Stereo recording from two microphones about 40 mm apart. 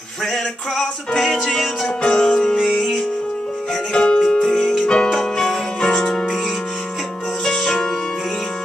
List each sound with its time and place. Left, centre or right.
0.3 s music: centre; by 2.3 s left
3.9 s music: centre
4.4 s music: centre
4.7 s music: left
5.1 s music: centre
7.4 s music: centre